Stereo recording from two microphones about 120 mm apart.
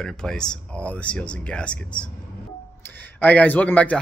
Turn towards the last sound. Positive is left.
turn(degrees=10)  # may be behind; listen again after turning